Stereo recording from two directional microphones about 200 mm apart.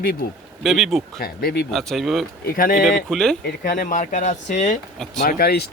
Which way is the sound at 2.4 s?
45° left (ahead or behind).